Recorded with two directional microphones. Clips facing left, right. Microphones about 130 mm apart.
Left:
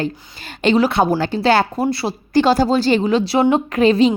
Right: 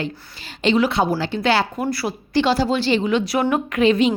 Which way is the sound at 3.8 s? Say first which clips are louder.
Left 3 dB; 35° left (ahead or behind).